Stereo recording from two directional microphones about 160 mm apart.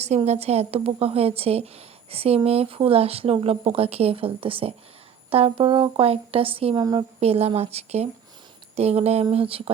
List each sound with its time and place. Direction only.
0.3 s speech: 40° right (ahead or behind)